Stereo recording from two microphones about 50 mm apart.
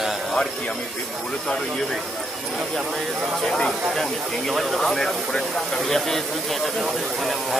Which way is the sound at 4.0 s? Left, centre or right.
Centre.